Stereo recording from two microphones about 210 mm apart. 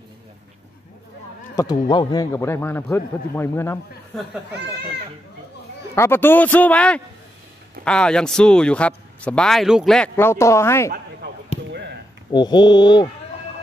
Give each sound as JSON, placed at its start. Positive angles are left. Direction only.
{"t": 1.5, "sound": "a man's voice", "side_deg": 15}
{"t": 5.9, "sound": "a man's voice", "side_deg": 10}
{"t": 11.2, "sound": "basketball bounce", "side_deg": -50}
{"t": 12.3, "sound": "speech", "side_deg": 20}